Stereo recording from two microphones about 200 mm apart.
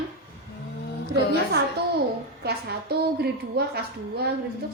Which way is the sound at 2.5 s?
55° right (ahead or behind).